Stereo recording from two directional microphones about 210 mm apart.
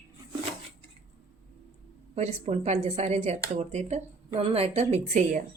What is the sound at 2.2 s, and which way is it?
Speech, 30° right (ahead or behind).